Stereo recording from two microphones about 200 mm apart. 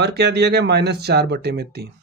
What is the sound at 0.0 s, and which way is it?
Speech, 55° right (ahead or behind).